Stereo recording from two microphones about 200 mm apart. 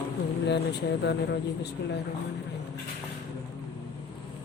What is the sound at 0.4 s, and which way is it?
Speech, 60° left (ahead or behind).